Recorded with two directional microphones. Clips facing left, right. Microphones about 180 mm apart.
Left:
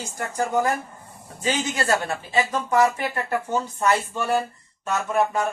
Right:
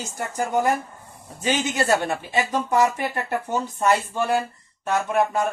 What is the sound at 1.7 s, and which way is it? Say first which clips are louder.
Speech: right 2 dB; 20° right (ahead or behind).